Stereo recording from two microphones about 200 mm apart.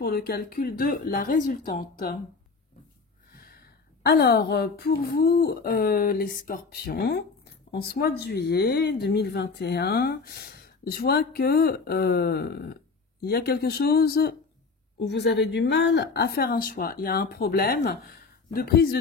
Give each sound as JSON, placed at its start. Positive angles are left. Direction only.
{"t": 0.0, "sound": "speech", "side_deg": 50}
{"t": 4.0, "sound": "speech", "side_deg": 55}